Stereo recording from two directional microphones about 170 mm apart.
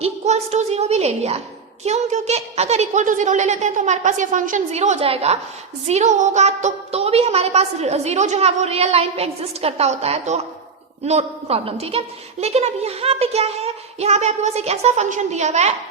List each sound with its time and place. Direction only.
0.0 s a woman's voice: 40° right (ahead or behind)